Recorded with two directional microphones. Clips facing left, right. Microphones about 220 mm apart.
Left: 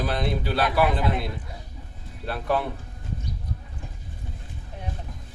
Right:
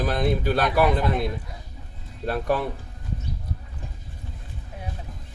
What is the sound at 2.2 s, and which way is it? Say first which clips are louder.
Speech: right 2 dB; 45° right (ahead or behind).